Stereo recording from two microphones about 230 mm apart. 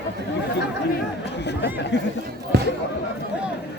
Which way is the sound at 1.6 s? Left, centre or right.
Left.